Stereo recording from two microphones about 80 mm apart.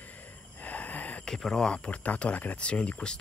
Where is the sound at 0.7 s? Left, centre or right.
Centre.